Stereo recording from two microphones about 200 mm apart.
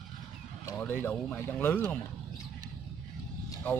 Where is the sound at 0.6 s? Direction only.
10° left (ahead or behind).